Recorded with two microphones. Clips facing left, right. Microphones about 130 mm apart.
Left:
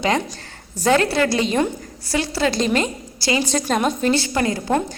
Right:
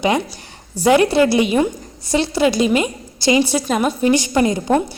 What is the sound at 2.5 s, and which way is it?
Speech, 10° right (ahead or behind).